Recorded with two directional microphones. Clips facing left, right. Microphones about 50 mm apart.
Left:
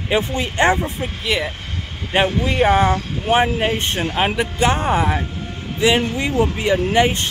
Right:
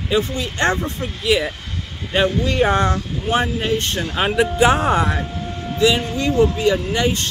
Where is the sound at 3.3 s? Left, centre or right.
Left.